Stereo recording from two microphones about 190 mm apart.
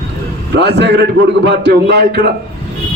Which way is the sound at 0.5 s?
65° right (ahead or behind).